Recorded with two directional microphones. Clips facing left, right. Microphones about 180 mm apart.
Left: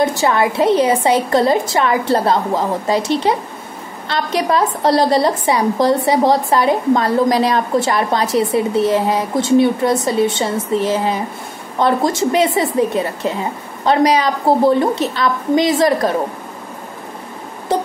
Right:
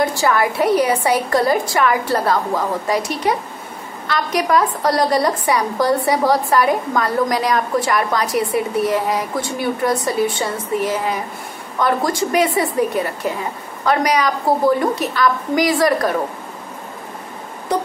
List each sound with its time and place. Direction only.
0.0 s a woman's voice: 20° left (ahead or behind)